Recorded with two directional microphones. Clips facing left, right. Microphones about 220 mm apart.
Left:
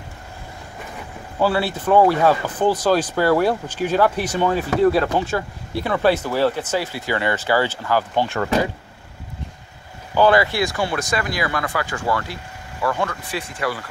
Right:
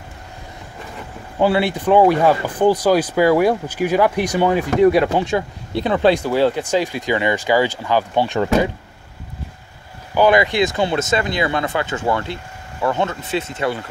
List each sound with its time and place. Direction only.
1.4 s speech: 15° right (ahead or behind)
10.1 s speech: 15° right (ahead or behind)